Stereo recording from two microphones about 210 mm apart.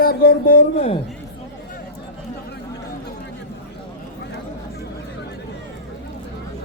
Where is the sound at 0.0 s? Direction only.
45° left (ahead or behind).